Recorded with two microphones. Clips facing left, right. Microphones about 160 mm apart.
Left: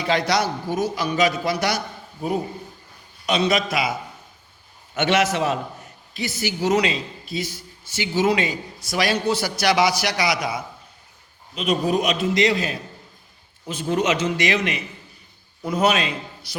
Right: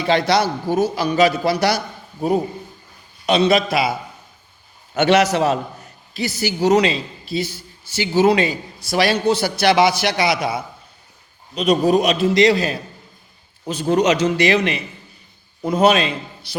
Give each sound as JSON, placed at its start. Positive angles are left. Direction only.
{"t": 0.0, "sound": "a man's voice", "side_deg": -30}
{"t": 3.2, "sound": "a man's voice", "side_deg": -30}
{"t": 4.9, "sound": "a man's voice", "side_deg": -35}